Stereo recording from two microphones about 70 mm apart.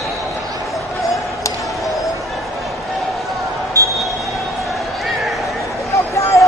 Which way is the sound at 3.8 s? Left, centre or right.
Right.